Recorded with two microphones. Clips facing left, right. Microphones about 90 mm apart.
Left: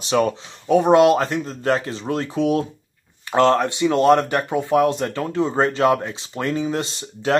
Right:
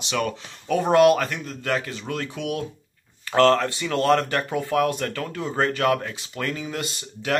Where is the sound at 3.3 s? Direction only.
20° left (ahead or behind).